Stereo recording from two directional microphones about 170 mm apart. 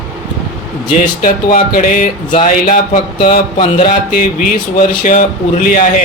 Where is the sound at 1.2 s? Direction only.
50° left (ahead or behind).